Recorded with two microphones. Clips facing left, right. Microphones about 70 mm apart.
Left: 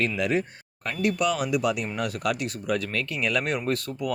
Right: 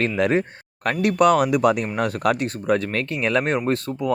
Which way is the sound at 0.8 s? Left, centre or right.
Right.